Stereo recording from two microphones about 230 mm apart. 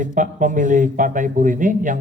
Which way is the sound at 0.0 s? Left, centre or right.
Right.